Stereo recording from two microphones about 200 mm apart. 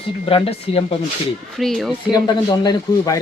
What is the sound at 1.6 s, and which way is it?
Speech, centre (ahead or behind).